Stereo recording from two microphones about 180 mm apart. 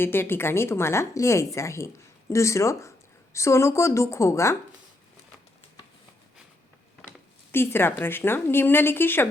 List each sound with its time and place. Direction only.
0.0 s a woman's voice: 10° left (ahead or behind)
7.5 s a woman's voice: 10° left (ahead or behind)